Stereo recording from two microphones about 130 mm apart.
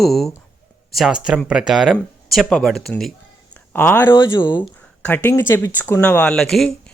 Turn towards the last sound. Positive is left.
turn(degrees=5)  # may be behind; listen again after turning